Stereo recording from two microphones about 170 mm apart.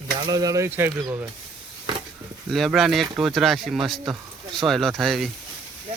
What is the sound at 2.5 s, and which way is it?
Speech, centre (ahead or behind).